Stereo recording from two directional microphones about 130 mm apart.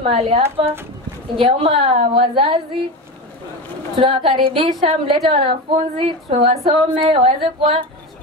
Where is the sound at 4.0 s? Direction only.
40° right (ahead or behind).